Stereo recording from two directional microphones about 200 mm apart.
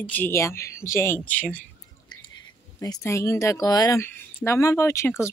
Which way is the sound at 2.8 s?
15° left (ahead or behind).